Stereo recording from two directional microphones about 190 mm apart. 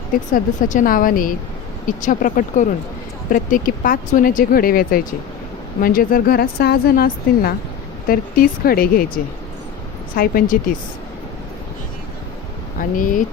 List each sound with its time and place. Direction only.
0.3 s speech: 45° left (ahead or behind)
12.8 s speech: 45° left (ahead or behind)